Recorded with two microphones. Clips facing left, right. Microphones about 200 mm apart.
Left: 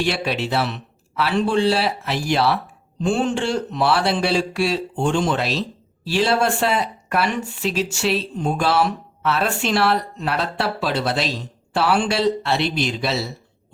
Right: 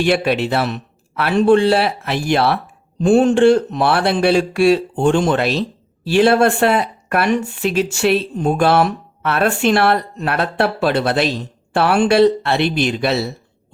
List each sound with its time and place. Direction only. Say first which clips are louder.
0.0 s speech: right 6 dB; 55° right (ahead or behind)